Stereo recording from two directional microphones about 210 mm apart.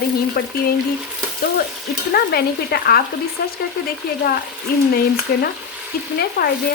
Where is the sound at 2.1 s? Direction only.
45° left (ahead or behind).